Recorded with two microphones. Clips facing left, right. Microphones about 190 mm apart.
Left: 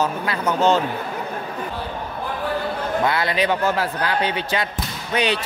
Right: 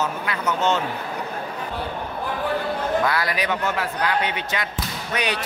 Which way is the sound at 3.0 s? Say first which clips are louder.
Left 3 dB; 25° left (ahead or behind).